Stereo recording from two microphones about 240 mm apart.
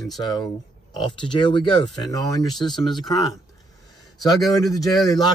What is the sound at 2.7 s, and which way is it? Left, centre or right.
Speech, centre.